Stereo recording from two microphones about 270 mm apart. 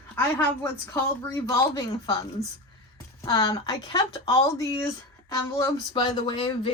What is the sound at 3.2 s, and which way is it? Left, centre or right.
Speech, centre.